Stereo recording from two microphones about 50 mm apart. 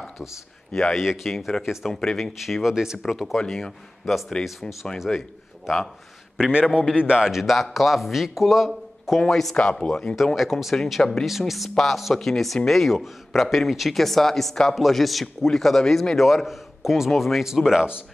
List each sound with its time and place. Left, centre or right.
0.7 s speech: left
1.0 s a man's voice: centre
2.6 s a man's voice: centre
3.0 s speech: centre
4.9 s a man's voice: centre
7.1 s a man's voice: centre
10.1 s a man's voice: centre